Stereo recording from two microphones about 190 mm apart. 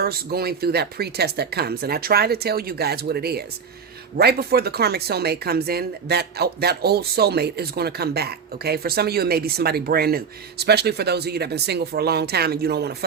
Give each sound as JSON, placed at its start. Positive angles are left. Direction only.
{"t": 0.0, "sound": "speech", "side_deg": -55}